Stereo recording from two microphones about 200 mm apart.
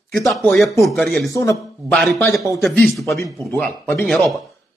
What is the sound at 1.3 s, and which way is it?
Speech, 15° left (ahead or behind).